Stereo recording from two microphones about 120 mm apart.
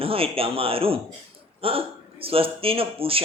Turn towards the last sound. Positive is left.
turn(degrees=-50)  # may be behind; listen again after turning